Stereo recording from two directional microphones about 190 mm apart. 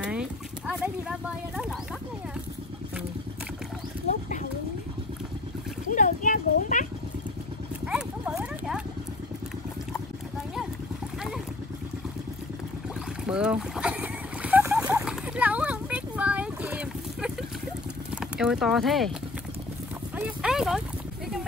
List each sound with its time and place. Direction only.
0.0 s horse: 5° right (ahead or behind)
5.9 s a sound: 40° left (ahead or behind)
7.9 s dog: 5° right (ahead or behind)
13.3 s boat: 5° right (ahead or behind)
18.1 s speech: 5° right (ahead or behind)
20.2 s clip-clop: 5° right (ahead or behind)